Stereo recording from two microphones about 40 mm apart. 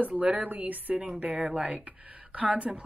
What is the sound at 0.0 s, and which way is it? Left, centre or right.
Speech, right.